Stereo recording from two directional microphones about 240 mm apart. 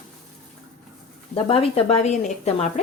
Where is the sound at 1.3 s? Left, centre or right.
Left.